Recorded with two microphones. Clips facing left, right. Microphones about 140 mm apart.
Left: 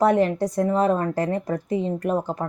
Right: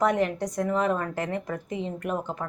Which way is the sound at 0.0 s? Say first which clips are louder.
Left 5 dB; 30° left (ahead or behind).